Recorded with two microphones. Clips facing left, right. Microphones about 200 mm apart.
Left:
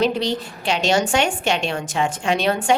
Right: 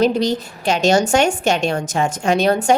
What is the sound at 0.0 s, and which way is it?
A woman's voice, 40° right (ahead or behind).